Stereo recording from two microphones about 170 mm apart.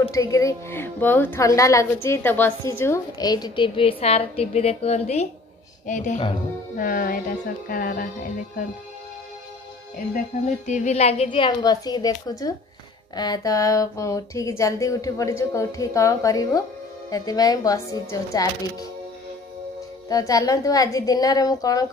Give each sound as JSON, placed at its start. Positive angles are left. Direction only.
{"t": 0.0, "sound": "speech", "side_deg": 20}
{"t": 10.7, "sound": "speech", "side_deg": 40}
{"t": 20.1, "sound": "speech", "side_deg": 20}